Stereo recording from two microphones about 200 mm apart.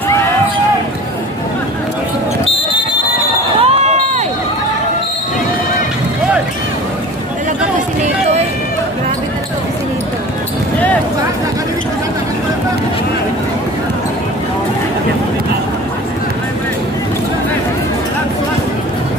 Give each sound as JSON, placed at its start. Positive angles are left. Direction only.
{"t": 3.6, "sound": "run", "side_deg": -30}
{"t": 8.0, "sound": "run", "side_deg": -35}